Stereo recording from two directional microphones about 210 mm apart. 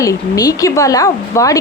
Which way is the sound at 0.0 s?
15° left (ahead or behind).